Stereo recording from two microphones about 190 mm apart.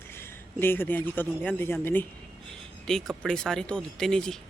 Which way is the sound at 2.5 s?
Centre (ahead or behind).